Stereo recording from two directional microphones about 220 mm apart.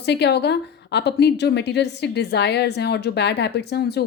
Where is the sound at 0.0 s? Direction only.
50° left (ahead or behind).